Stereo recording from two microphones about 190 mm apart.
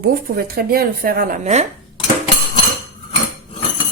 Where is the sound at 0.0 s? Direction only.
55° right (ahead or behind).